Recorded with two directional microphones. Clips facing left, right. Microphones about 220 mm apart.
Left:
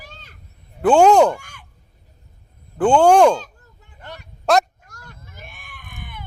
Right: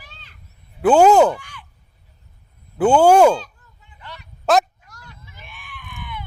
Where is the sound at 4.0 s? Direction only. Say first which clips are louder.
Left 3 dB; 50° left (ahead or behind).